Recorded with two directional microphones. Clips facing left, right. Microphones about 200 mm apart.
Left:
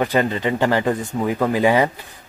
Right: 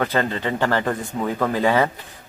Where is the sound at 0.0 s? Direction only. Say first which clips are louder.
Left 3 dB; 15° left (ahead or behind).